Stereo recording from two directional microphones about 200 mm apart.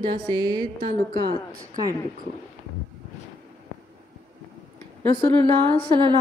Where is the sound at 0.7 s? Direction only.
45° right (ahead or behind).